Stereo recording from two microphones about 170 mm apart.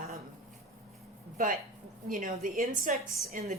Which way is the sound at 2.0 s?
50° right (ahead or behind).